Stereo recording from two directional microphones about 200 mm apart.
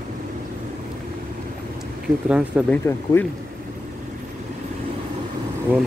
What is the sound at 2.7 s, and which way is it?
Speech, 10° left (ahead or behind).